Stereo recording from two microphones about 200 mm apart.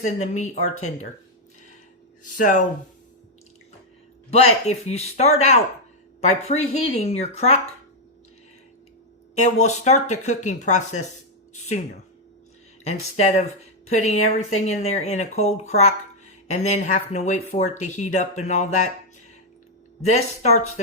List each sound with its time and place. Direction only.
0.0 s speech: 35° left (ahead or behind)
2.2 s speech: 40° left (ahead or behind)
4.3 s speech: 30° left (ahead or behind)
9.4 s speech: 35° left (ahead or behind)
12.8 s speech: 35° left (ahead or behind)
20.0 s speech: 35° left (ahead or behind)